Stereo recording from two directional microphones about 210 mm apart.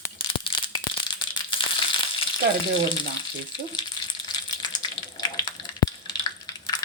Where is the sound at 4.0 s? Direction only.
20° left (ahead or behind).